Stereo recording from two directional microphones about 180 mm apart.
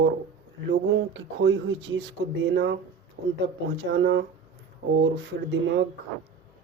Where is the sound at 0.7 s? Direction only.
90° right; by 4.3 s 70° right (ahead or behind).